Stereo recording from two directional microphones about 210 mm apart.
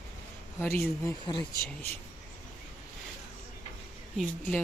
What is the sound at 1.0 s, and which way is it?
Speech, 20° left (ahead or behind).